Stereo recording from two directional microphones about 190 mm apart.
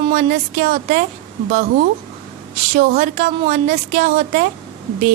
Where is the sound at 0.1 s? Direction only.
40° right (ahead or behind).